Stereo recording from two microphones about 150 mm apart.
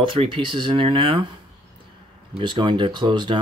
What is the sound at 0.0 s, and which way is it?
Speech, 35° right (ahead or behind).